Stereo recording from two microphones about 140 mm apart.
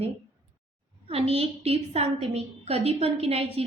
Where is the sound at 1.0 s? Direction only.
45° right (ahead or behind).